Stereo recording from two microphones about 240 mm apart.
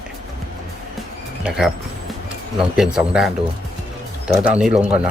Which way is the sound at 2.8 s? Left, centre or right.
Centre.